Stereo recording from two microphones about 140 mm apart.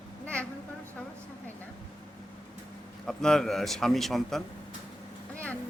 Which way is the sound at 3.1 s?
5° left (ahead or behind).